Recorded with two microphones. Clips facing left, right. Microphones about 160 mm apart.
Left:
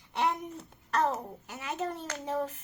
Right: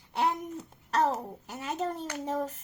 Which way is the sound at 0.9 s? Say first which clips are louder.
Right 2 dB; 35° right (ahead or behind).